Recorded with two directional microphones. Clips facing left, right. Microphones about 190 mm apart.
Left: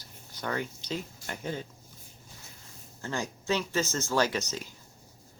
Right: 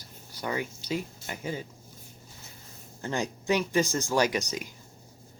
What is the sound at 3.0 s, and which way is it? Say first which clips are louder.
Speech: right 3 dB; 15° right (ahead or behind).